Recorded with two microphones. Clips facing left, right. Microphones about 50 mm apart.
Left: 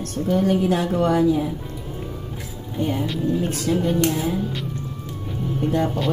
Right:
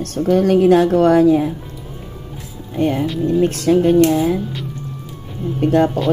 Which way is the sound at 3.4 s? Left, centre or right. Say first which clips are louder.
Right 8 dB; right.